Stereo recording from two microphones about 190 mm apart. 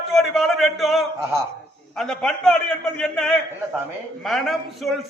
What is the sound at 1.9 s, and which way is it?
A man's voice, centre (ahead or behind).